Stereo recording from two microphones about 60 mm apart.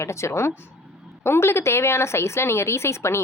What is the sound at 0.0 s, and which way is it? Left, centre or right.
A woman's voice, left.